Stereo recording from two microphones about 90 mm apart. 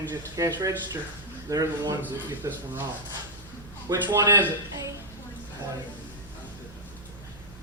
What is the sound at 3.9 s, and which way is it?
Speech, 45° right (ahead or behind).